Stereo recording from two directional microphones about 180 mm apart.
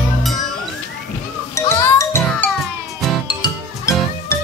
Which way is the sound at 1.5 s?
15° left (ahead or behind).